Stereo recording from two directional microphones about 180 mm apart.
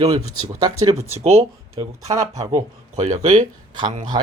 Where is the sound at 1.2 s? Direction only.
35° right (ahead or behind).